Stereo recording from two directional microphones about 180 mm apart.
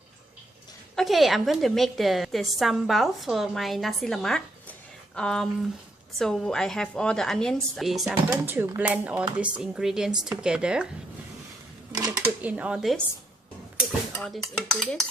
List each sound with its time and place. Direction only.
0.9 s a woman's voice: centre (ahead or behind)
8.4 s a woman's voice: 10° right (ahead or behind)
11.9 s a sound: 20° right (ahead or behind)
12.4 s speech: 10° right (ahead or behind)
14.2 s a woman's voice: centre (ahead or behind)